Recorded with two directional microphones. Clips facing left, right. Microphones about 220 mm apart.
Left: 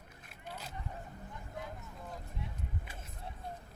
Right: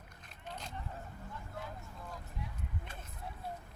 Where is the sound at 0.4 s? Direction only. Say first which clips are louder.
Even; 5° left (ahead or behind).